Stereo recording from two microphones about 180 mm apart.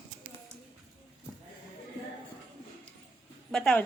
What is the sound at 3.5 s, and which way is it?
Speech, 5° left (ahead or behind).